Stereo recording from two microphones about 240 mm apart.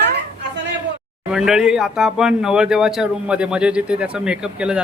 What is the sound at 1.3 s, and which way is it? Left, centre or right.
Speech, centre.